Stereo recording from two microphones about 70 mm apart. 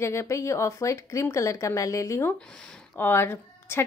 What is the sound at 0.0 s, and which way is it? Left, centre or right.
Speech, left.